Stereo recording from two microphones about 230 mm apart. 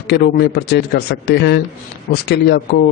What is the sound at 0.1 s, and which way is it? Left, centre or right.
A man's voice, left.